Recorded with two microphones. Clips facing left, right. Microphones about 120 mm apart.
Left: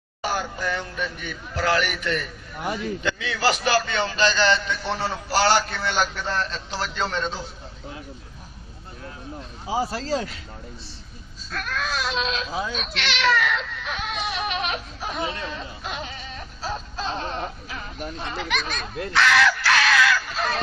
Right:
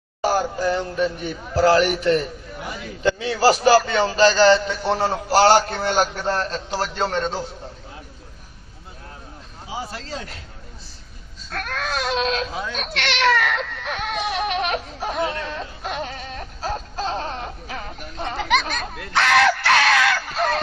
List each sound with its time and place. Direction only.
0.2 s a man's voice: 40° right (ahead or behind)
9.6 s speech: 35° left (ahead or behind)
11.5 s speech: 55° right (ahead or behind)
12.5 s speech: 5° left (ahead or behind)
12.7 s speech: 55° right (ahead or behind)
19.1 s crow: 50° right (ahead or behind)